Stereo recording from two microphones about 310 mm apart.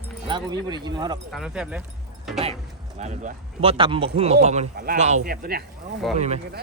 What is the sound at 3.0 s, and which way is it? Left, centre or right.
Speech, right.